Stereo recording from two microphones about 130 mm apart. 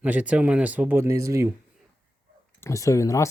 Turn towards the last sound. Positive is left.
turn(degrees=25)  # may be behind; listen again after turning